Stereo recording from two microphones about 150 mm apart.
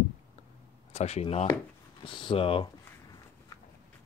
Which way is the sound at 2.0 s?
35° left (ahead or behind).